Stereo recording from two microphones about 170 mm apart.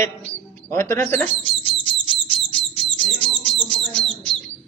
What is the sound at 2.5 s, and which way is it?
Bird, 5° left (ahead or behind).